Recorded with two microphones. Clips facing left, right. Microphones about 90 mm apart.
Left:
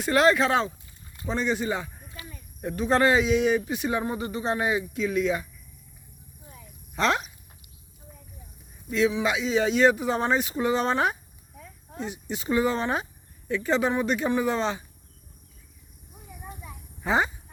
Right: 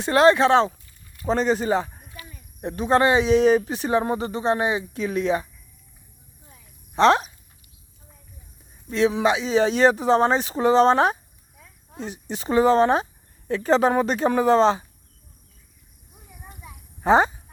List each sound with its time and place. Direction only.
0.0 s speech: 25° right (ahead or behind)
1.3 s speech: 45° right (ahead or behind)
2.6 s speech: 25° right (ahead or behind)
3.3 s speech: 35° right (ahead or behind)
6.9 s speech: 25° right (ahead or behind)
8.9 s speech: 30° right (ahead or behind)
16.4 s a sound: 5° left (ahead or behind)
17.0 s speech: 35° right (ahead or behind)